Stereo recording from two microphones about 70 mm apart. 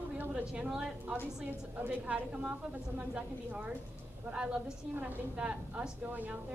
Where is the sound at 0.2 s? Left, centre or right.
Centre.